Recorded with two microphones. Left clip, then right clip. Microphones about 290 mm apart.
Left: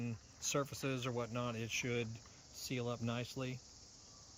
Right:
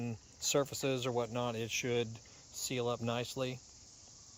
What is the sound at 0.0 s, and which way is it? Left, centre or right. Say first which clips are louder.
Speech: right 5 dB; centre.